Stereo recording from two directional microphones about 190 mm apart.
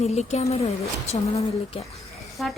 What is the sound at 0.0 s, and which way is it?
Speech, 35° left (ahead or behind).